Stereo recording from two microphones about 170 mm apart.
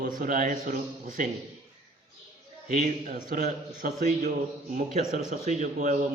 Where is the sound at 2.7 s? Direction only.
55° right (ahead or behind).